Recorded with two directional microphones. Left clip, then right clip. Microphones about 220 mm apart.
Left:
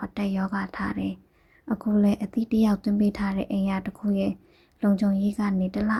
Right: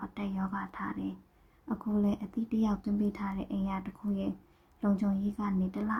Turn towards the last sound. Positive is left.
turn(degrees=20)  # may be behind; listen again after turning